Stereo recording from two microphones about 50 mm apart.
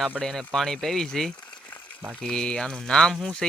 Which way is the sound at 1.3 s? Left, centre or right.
Left.